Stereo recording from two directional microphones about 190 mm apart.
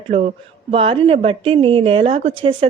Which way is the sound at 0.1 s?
35° right (ahead or behind).